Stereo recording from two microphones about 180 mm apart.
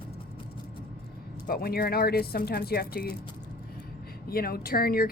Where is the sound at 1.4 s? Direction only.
55° left (ahead or behind).